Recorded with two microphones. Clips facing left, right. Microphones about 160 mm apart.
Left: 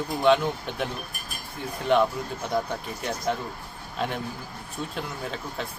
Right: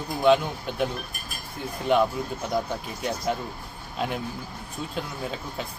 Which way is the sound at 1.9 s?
5° right (ahead or behind).